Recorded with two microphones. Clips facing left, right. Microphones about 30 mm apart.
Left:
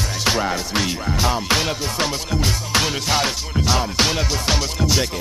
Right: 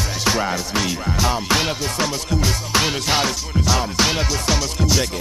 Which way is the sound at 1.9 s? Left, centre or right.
Centre.